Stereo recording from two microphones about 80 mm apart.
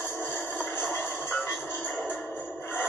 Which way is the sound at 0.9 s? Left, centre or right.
Left.